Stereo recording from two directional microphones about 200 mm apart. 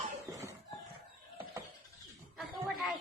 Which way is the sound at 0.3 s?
15° right (ahead or behind).